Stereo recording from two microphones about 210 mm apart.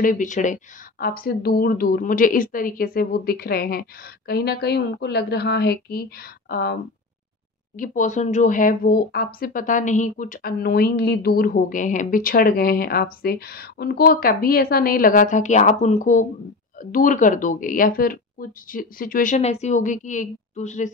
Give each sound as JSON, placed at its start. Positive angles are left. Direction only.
{"t": 0.0, "sound": "speech", "side_deg": 35}